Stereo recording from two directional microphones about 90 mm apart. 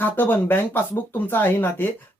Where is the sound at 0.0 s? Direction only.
20° left (ahead or behind).